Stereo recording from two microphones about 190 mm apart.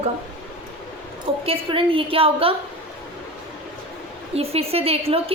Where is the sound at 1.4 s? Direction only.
30° right (ahead or behind).